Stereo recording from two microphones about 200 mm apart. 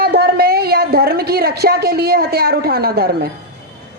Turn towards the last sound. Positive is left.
turn(degrees=-50)  # may be behind; listen again after turning